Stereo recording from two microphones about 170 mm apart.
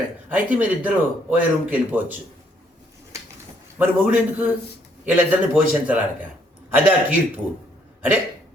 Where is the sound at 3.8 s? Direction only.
10° right (ahead or behind).